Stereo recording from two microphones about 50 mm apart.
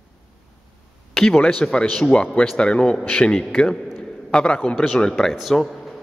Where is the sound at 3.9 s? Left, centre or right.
Centre.